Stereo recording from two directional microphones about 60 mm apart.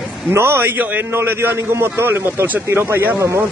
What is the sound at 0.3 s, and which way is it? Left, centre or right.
Speech, right.